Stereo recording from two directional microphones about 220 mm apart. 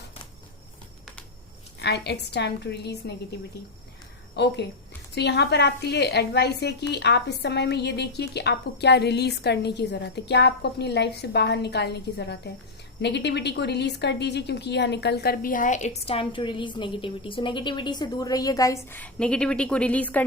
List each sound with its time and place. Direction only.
1.8 s speech: 50° left (ahead or behind)
4.4 s a woman's voice: 50° left (ahead or behind); by 20.2 s 5° left (ahead or behind)